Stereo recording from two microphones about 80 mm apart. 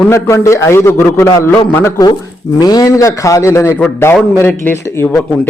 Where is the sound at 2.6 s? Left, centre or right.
Left.